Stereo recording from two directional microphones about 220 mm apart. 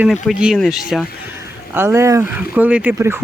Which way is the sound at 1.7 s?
10° right (ahead or behind).